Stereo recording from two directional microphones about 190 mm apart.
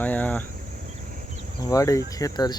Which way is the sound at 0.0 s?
10° left (ahead or behind).